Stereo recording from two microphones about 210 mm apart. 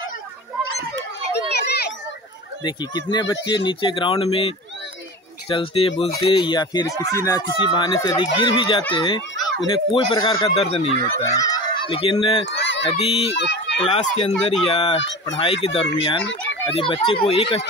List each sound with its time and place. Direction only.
1.6 s children playing: 50° left (ahead or behind)
2.6 s speech: 20° left (ahead or behind)
11.1 s fowl: 15° left (ahead or behind)
12.4 s a sound: 60° left (ahead or behind)
12.9 s speech: 30° left (ahead or behind)
13.4 s speech: 55° left (ahead or behind)
13.9 s speech: 30° left (ahead or behind)
14.3 s speech: centre (ahead or behind)
14.7 s speech: 25° left (ahead or behind)
16.2 s speech: 60° left (ahead or behind)
16.7 s speech: 25° left (ahead or behind)